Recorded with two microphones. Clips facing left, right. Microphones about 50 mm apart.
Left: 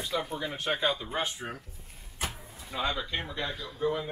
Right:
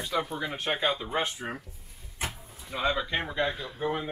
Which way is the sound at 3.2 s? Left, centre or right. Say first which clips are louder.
Right 5 dB; right.